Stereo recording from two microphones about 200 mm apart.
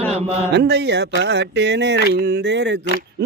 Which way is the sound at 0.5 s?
55° right (ahead or behind).